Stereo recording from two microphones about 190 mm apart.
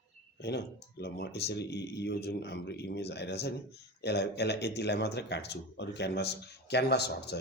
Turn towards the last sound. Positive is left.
turn(degrees=60)  # may be behind; listen again after turning